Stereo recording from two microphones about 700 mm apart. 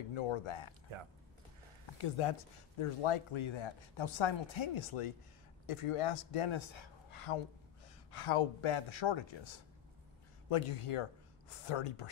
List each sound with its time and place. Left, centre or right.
0.1 s a man's voice: left
2.0 s a man's voice: left
10.5 s a man's voice: left